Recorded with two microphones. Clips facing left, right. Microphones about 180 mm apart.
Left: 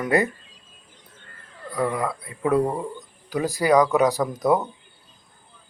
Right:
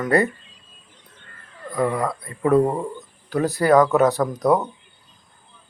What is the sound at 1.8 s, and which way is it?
Speech, 10° right (ahead or behind).